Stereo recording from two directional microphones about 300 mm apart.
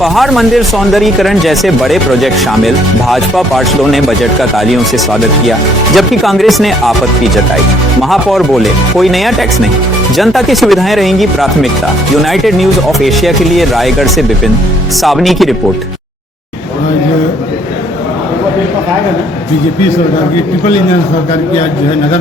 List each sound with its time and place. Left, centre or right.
0.0 s speech: centre
8.1 s speech: centre